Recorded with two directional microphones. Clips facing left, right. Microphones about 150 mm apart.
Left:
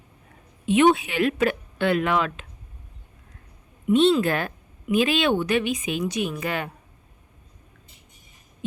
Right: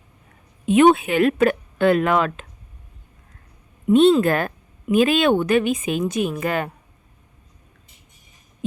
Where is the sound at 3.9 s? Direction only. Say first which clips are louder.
Right 4 dB; 50° right (ahead or behind).